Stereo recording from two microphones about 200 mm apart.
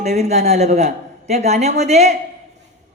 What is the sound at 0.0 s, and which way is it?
A man's voice, 35° right (ahead or behind).